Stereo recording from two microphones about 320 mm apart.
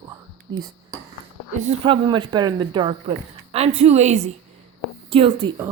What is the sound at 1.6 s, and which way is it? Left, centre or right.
A woman's voice, centre.